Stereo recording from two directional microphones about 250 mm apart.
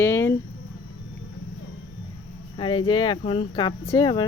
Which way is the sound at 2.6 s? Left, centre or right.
Centre.